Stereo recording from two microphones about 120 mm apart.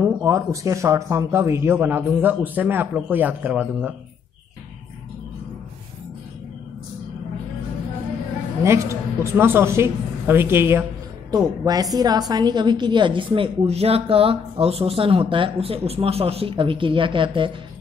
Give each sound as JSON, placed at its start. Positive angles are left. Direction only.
{"t": 0.0, "sound": "a man's voice", "side_deg": -25}
{"t": 8.6, "sound": "speech", "side_deg": -25}
{"t": 11.2, "sound": "a woman's voice", "side_deg": -30}